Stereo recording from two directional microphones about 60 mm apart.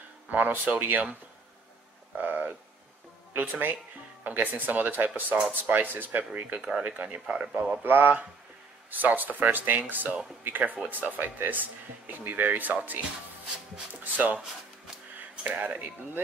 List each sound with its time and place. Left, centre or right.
0.3 s speech: right
2.1 s a sound: right
3.3 s speech: right
7.8 s speech: right
14.1 s speech: right
15.4 s speech: right